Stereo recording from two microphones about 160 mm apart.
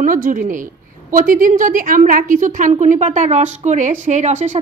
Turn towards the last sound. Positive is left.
turn(degrees=-50)  # may be behind; listen again after turning